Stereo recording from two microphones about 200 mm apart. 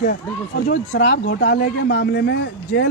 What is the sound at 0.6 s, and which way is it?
A man's voice, 60° left (ahead or behind).